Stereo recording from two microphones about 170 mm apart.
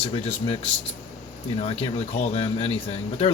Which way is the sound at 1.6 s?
35° left (ahead or behind).